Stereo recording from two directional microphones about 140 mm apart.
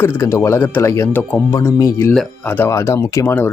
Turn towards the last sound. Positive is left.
turn(degrees=20)  # may be behind; listen again after turning